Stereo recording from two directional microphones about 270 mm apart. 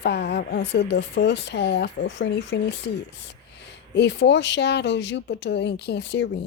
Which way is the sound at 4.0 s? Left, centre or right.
Left.